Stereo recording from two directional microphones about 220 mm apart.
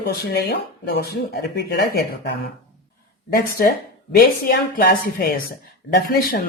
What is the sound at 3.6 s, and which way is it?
A woman's voice, 40° left (ahead or behind).